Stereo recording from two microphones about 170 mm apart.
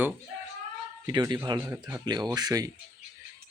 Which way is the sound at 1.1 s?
25° right (ahead or behind).